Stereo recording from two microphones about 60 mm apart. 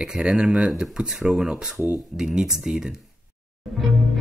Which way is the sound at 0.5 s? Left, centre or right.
Centre.